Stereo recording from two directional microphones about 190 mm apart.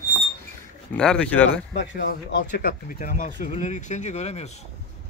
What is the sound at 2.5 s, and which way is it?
Speech, 45° left (ahead or behind).